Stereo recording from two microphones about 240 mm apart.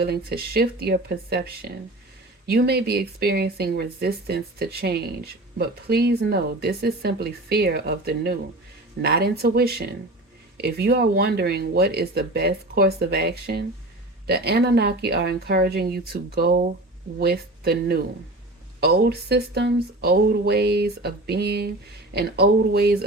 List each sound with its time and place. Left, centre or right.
0.0 s speech: right